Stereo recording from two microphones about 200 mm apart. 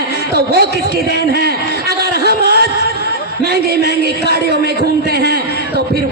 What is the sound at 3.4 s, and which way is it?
Speech, 50° right (ahead or behind).